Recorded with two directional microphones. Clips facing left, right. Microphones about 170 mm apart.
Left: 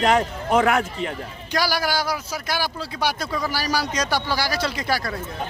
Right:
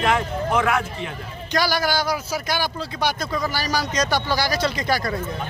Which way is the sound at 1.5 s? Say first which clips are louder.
Right 1 dB; 10° left (ahead or behind).